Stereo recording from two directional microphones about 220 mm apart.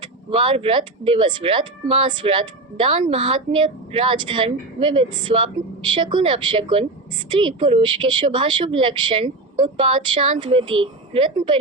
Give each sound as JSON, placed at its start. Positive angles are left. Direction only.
{"t": 0.0, "sound": "speech", "side_deg": -25}